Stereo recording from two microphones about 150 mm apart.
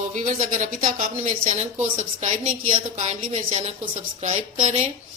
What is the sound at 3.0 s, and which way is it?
A woman's voice, 50° right (ahead or behind).